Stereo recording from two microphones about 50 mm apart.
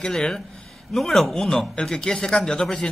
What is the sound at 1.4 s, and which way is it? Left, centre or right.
A man's voice, centre.